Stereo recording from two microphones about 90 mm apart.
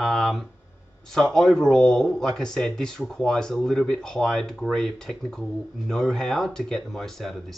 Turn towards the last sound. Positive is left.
turn(degrees=5)  # may be behind; listen again after turning